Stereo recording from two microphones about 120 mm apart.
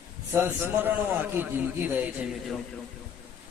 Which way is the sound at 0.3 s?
15° right (ahead or behind).